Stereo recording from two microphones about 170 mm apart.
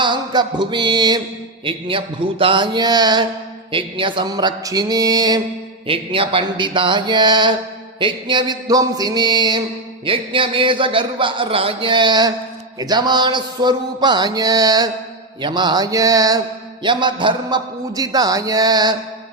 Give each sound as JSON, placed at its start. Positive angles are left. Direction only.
{"t": 0.0, "sound": "speech", "side_deg": -25}